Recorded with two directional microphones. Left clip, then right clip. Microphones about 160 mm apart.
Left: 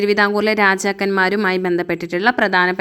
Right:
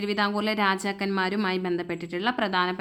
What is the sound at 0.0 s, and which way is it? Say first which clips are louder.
A woman's voice: left 11 dB; 35° left (ahead or behind).